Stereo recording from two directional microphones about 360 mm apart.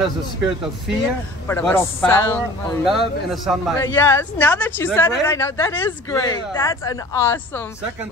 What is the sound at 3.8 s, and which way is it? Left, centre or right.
A man's voice, centre.